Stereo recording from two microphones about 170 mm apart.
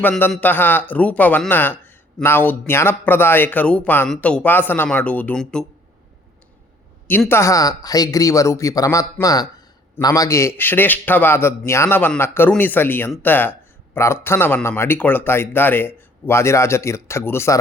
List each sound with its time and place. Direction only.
0.0 s speech: 5° left (ahead or behind)
7.1 s speech: 10° left (ahead or behind)